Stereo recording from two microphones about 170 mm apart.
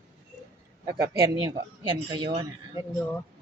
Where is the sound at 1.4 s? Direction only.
25° right (ahead or behind).